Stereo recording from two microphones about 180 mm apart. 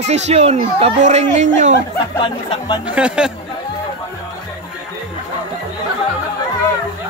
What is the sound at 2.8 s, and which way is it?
Speech, 5° right (ahead or behind).